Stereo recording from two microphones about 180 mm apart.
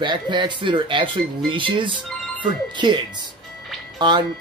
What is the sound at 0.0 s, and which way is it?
Speech, 25° right (ahead or behind).